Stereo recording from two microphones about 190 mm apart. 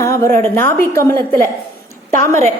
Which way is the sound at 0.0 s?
15° left (ahead or behind).